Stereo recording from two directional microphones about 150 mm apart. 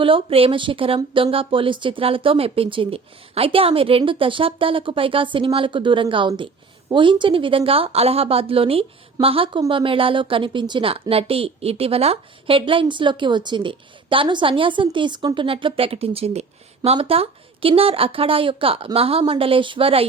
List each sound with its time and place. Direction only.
0.0 s a woman's voice: 35° right (ahead or behind)